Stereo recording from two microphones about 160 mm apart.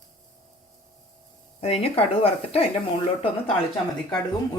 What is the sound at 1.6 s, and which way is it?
Speech, 40° left (ahead or behind).